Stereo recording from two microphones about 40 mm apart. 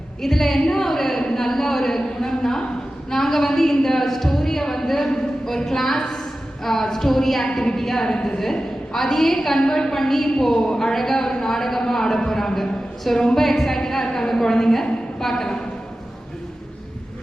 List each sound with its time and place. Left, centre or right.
0.2 s a woman's voice: centre
7.5 s a woman's voice: centre